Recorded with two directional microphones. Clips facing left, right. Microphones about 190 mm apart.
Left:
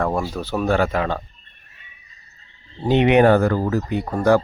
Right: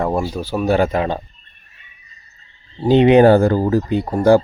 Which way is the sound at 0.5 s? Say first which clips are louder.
Right 3 dB; 10° right (ahead or behind).